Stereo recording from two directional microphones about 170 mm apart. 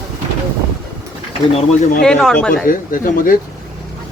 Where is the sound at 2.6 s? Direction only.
55° left (ahead or behind).